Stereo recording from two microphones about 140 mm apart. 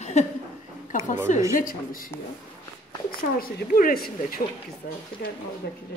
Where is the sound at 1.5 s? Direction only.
80° left.